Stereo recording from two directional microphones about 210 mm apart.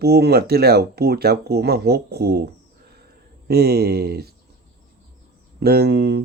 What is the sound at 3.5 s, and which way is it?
Speech, 50° right (ahead or behind).